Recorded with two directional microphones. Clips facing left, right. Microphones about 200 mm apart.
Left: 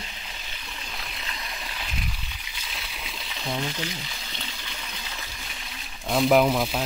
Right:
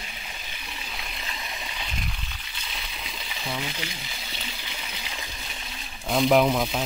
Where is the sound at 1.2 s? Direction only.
Centre (ahead or behind).